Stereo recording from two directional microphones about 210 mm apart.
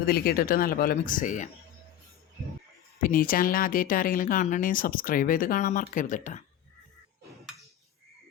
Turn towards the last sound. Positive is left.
turn(degrees=35)  # may be behind; listen again after turning